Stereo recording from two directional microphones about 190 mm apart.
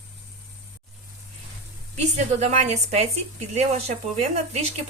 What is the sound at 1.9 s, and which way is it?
A woman's voice, 35° right (ahead or behind).